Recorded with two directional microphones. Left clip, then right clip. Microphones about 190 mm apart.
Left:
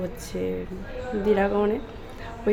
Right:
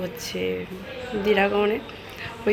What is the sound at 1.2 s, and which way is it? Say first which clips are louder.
Speech: right 2 dB; 15° left (ahead or behind).